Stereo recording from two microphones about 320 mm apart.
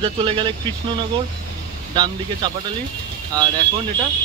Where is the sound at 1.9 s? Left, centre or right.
Centre.